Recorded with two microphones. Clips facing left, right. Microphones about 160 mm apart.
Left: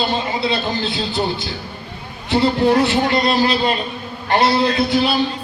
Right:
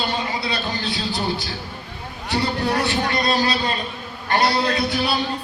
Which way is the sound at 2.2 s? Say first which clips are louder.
Left 7 dB; 25° left (ahead or behind).